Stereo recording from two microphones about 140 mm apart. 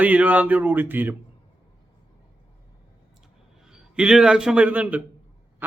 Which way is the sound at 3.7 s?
5° right (ahead or behind).